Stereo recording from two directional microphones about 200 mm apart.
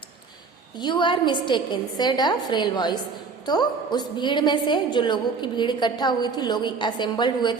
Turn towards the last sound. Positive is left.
turn(degrees=20)  # may be behind; listen again after turning